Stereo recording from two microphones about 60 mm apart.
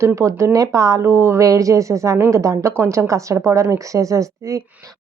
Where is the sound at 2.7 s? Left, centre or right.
Right.